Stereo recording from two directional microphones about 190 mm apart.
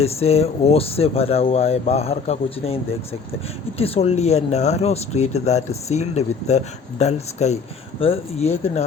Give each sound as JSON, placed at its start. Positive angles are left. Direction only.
{"t": 0.0, "sound": "speech", "side_deg": 30}
{"t": 3.8, "sound": "speech", "side_deg": 30}